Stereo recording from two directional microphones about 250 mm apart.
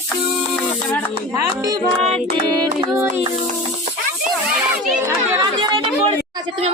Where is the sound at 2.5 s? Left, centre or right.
Centre.